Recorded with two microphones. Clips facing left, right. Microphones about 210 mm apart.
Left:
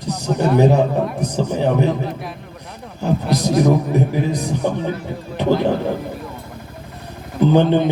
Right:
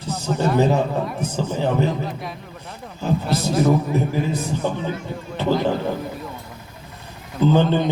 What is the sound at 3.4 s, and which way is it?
Speech, 15° left (ahead or behind).